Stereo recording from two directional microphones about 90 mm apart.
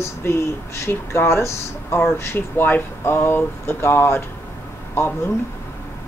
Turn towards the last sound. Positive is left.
turn(degrees=25)  # may be behind; listen again after turning